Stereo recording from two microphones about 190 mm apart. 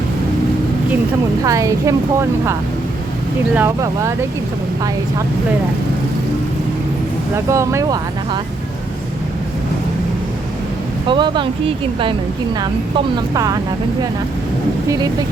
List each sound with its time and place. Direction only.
1.5 s speech: 15° right (ahead or behind)
3.5 s speech: 15° right (ahead or behind)
7.3 s speech: 15° right (ahead or behind)
11.1 s speech: 25° right (ahead or behind)
13.1 s speech: 20° right (ahead or behind)
14.8 s speech: 20° right (ahead or behind)